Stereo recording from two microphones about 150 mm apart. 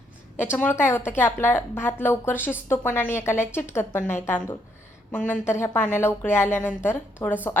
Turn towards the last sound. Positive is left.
turn(degrees=15)  # may be behind; listen again after turning